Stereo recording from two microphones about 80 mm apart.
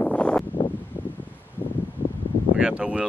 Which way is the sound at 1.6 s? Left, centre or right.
Left.